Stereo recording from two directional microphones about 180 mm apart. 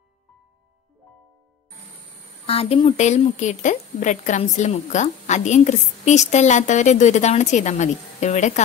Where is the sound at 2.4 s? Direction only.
35° left (ahead or behind).